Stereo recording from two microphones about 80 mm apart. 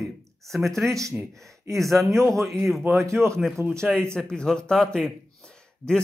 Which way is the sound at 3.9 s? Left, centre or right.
Centre.